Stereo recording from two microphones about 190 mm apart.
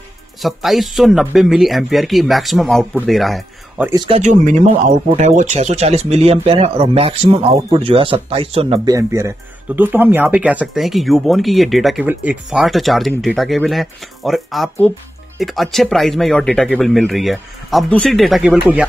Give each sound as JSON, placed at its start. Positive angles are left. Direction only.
{"t": 0.4, "sound": "speech", "side_deg": 0}
{"t": 3.8, "sound": "speech", "side_deg": -20}
{"t": 4.2, "sound": "speech", "side_deg": -40}